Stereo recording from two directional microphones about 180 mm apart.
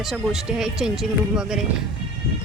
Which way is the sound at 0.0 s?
Centre (ahead or behind).